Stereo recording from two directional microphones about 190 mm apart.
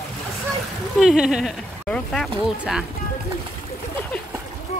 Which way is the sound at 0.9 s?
Centre (ahead or behind).